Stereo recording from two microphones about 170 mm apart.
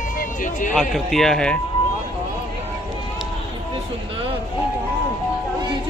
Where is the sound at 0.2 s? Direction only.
50° left (ahead or behind).